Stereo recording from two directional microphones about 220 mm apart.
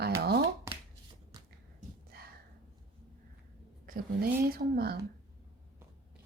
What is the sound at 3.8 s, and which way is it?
A woman's voice, 40° right (ahead or behind).